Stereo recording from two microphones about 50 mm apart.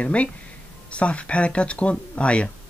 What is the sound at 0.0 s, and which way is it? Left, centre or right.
Speech, left.